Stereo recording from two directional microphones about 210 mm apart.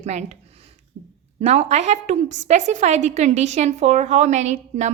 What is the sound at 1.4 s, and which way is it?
A woman's voice, 30° right (ahead or behind).